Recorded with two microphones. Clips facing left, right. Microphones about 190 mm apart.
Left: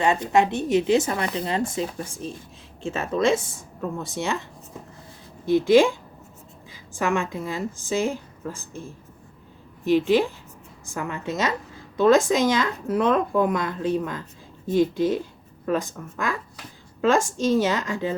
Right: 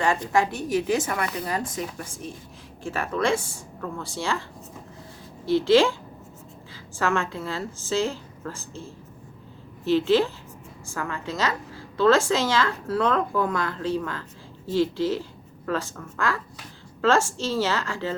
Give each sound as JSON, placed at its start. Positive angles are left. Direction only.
{"t": 0.0, "sound": "speech", "side_deg": 20}
{"t": 5.5, "sound": "a woman's voice", "side_deg": 15}